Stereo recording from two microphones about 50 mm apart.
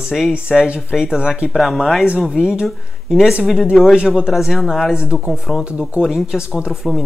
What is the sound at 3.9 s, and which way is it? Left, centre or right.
Speech, centre.